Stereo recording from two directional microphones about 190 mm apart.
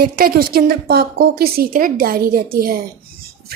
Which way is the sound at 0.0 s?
50° right (ahead or behind).